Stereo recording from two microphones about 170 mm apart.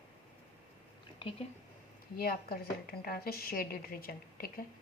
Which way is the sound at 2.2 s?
65° left (ahead or behind).